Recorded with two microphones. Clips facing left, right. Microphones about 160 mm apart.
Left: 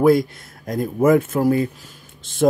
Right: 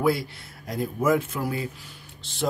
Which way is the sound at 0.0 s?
45° left (ahead or behind).